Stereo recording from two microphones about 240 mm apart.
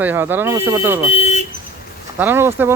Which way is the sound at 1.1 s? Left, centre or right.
Left.